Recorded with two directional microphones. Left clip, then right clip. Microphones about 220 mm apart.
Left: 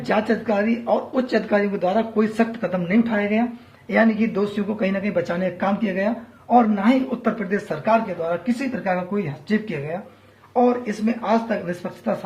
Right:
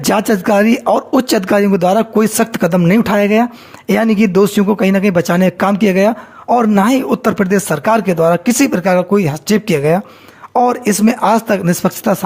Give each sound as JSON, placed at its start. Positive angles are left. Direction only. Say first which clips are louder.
{"t": 0.1, "sound": "speech", "louder": "right 8 dB", "side_deg": -50}